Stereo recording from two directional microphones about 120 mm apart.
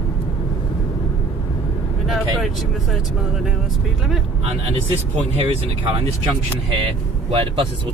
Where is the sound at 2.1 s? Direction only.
Centre (ahead or behind).